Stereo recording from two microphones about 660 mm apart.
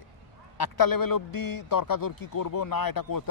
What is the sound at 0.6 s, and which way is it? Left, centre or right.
A man's voice, left.